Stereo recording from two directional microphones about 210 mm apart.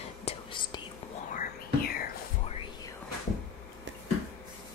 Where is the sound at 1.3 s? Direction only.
45° left (ahead or behind).